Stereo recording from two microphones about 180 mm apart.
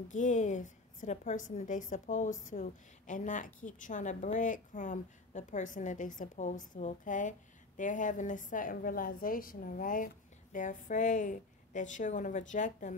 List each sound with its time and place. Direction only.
0.1 s a woman's voice: 45° left (ahead or behind)